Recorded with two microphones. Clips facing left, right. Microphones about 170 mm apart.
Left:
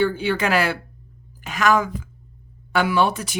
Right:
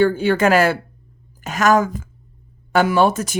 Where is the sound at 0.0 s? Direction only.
45° right (ahead or behind).